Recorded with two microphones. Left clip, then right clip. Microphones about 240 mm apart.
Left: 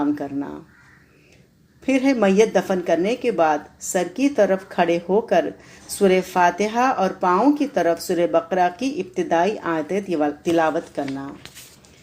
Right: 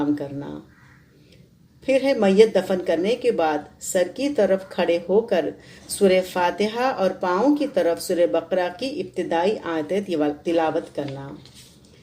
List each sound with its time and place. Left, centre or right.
0.2 s speech: left
1.8 s speech: left